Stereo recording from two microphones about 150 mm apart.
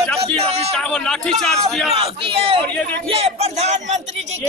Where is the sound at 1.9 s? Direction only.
40° right (ahead or behind).